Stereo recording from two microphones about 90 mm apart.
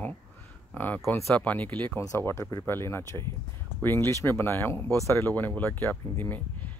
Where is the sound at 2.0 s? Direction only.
35° left (ahead or behind).